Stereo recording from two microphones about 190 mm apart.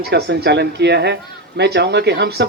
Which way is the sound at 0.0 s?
60° right (ahead or behind).